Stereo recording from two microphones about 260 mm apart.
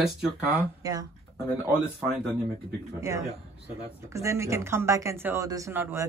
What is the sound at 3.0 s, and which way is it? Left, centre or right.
Speech, centre.